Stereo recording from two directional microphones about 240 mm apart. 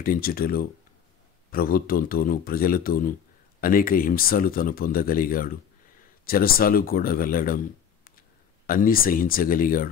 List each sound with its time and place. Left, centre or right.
0.0 s speech: left